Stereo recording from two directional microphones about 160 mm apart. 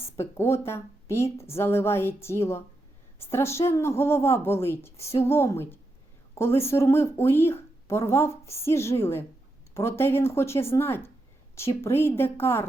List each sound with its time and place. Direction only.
0.0 s speech: 15° left (ahead or behind)